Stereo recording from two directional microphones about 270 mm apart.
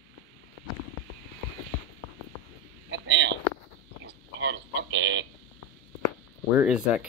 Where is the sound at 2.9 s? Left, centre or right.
Right.